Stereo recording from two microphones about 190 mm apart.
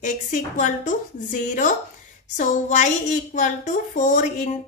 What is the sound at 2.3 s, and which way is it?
A woman's voice, 40° left (ahead or behind).